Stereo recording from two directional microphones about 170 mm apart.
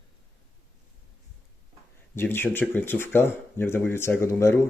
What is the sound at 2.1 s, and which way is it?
Speech, 10° left (ahead or behind).